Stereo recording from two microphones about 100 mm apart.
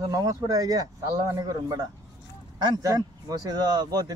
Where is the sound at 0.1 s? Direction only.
35° right (ahead or behind).